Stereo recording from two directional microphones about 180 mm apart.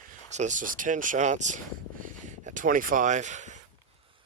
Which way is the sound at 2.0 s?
45° right (ahead or behind).